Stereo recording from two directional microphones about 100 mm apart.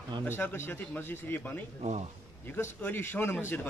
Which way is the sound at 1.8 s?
90° right.